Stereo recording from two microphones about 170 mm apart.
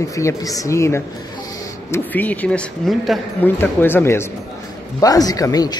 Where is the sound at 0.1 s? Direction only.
20° left (ahead or behind).